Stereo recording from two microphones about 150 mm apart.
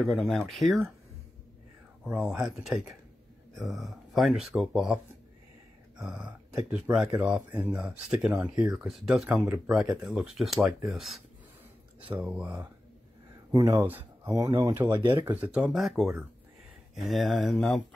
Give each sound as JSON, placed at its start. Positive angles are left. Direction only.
{"t": 0.0, "sound": "speech", "side_deg": 0}
{"t": 2.0, "sound": "speech", "side_deg": -10}
{"t": 13.5, "sound": "speech", "side_deg": -20}